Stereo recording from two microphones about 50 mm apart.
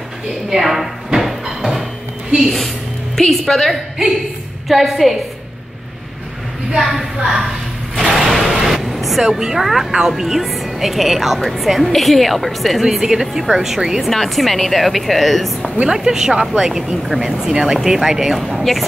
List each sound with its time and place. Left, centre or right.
0.5 s music: centre
3.2 s speech: centre
6.8 s a woman's voice: centre
14.0 s speech: centre
15.9 s a woman's voice: centre